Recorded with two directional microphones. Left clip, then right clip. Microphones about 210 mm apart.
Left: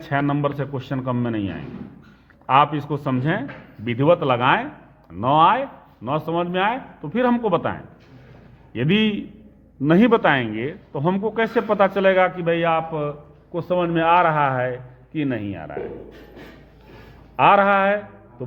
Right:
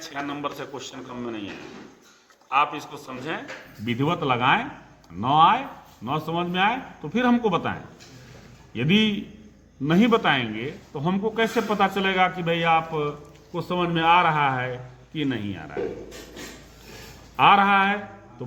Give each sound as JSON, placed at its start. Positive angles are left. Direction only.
{"t": 0.0, "sound": "speech", "side_deg": 40}
{"t": 2.5, "sound": "a man's voice", "side_deg": 45}
{"t": 17.3, "sound": "speech", "side_deg": 35}